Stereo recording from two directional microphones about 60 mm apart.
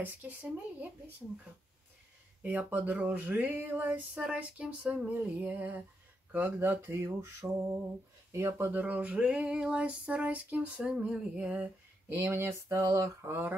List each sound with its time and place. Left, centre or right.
0.0 s speech: right
2.4 s female singing: right
6.3 s speech: right
7.0 s speech: right
8.8 s female singing: right
12.1 s speech: right